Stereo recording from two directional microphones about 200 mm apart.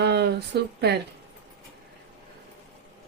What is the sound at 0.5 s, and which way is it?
Speech, 55° right (ahead or behind).